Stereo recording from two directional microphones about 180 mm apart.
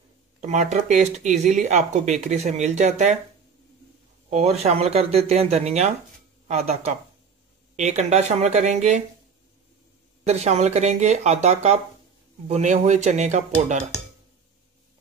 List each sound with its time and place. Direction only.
0.4 s speech: 40° right (ahead or behind)
4.3 s speech: 35° right (ahead or behind)
10.2 s speech: 35° right (ahead or behind)